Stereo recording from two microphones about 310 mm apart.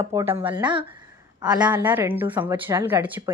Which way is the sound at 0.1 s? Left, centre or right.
Centre.